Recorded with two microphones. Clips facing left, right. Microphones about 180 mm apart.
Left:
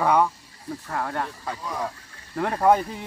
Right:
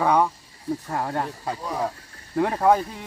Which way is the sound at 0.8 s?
20° right (ahead or behind).